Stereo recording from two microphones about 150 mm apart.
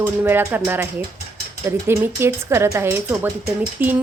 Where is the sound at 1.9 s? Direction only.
15° right (ahead or behind).